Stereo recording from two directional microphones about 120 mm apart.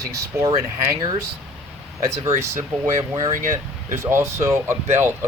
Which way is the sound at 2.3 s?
70° right (ahead or behind).